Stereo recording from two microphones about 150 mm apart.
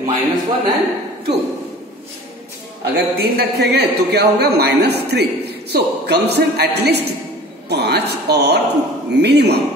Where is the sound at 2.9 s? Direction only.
90° right.